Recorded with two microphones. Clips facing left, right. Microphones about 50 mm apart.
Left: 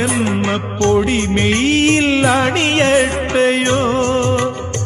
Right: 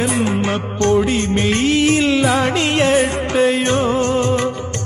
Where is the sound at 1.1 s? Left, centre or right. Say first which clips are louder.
Left 1 dB; left.